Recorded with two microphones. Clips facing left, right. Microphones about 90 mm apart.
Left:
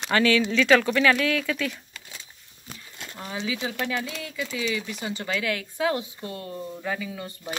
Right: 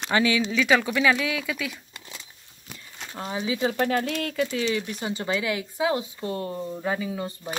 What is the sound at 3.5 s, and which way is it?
Speech, 50° right (ahead or behind).